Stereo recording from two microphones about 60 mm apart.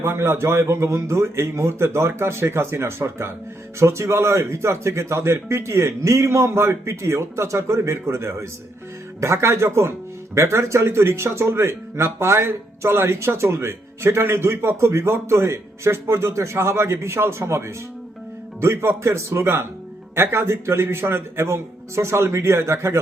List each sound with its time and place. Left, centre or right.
0.0 s speech: right
3.8 s speech: right